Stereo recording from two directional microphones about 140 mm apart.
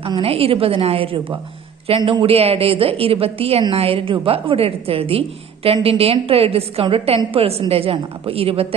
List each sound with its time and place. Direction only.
0.2 s a woman's voice: 45° right (ahead or behind)